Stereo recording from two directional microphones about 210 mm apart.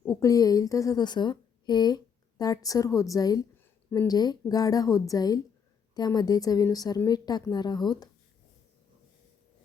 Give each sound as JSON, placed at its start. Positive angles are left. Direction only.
{"t": 0.0, "sound": "a woman's voice", "side_deg": 15}